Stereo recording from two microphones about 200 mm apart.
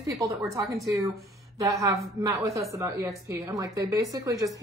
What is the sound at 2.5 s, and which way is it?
Speech, 15° right (ahead or behind).